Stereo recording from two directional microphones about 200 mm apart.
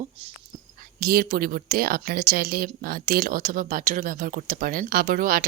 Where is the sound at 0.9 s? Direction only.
50° right (ahead or behind).